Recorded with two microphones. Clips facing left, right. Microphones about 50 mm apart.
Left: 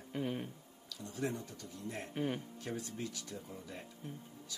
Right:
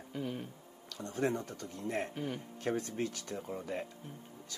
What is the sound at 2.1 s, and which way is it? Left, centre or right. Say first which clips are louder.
Speech: left 2 dB; centre.